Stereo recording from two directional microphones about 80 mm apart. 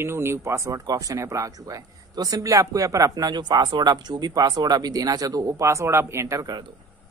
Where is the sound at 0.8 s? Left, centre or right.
Right.